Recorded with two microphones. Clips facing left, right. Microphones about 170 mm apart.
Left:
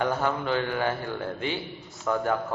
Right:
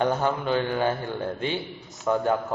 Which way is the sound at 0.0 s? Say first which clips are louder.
Right 2 dB; 20° right (ahead or behind).